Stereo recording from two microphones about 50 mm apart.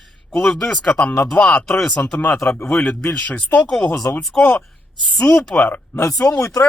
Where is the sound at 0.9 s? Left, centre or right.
Left.